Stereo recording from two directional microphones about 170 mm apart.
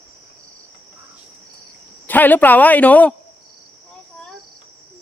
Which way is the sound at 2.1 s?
10° left (ahead or behind).